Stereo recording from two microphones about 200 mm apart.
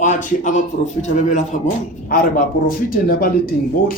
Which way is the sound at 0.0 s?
40° left (ahead or behind).